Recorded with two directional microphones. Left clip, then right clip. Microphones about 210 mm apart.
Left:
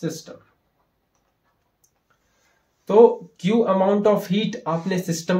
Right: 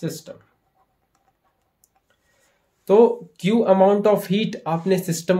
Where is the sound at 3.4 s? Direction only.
40° right (ahead or behind).